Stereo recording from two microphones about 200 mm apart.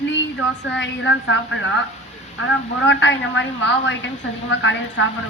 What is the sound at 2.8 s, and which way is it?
A woman's voice, 65° left (ahead or behind).